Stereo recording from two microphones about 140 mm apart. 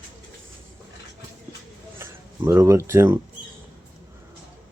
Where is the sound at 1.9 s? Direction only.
20° right (ahead or behind).